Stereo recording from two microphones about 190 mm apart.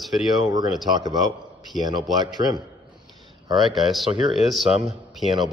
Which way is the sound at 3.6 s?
Centre (ahead or behind).